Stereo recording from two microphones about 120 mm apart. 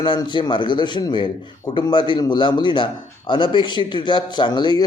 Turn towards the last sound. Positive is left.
turn(degrees=35)  # may be behind; listen again after turning